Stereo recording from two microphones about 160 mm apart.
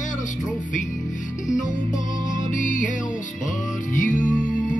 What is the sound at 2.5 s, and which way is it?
Music, 50° left (ahead or behind).